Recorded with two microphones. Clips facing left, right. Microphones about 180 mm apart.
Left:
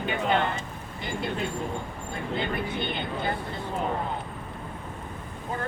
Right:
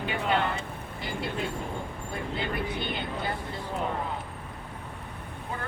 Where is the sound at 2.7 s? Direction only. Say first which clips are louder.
Left 2 dB; 25° left (ahead or behind).